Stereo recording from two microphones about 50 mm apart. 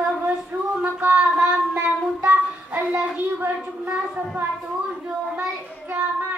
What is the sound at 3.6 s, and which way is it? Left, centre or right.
A woman's voice, right.